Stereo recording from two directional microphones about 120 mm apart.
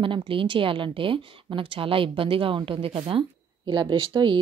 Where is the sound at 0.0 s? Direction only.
45° right (ahead or behind).